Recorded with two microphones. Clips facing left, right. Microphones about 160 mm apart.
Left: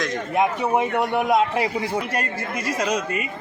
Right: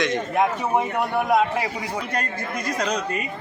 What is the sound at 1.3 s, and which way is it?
Speech, 25° left (ahead or behind).